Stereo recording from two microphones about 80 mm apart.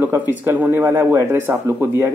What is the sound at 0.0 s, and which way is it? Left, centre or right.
Speech, right.